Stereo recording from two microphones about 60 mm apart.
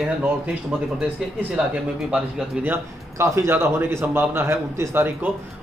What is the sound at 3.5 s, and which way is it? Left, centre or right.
A man's voice, right.